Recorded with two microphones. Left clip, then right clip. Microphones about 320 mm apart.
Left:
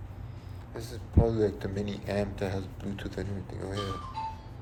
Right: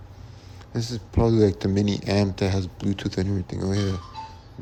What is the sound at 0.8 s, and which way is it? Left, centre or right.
Speech, right.